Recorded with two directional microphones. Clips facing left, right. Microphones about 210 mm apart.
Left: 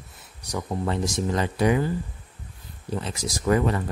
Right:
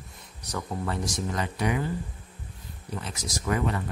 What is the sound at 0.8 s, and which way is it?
Speech, 30° left (ahead or behind).